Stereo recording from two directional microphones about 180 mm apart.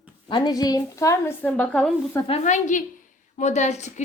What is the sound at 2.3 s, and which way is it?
A woman's voice, 45° left (ahead or behind).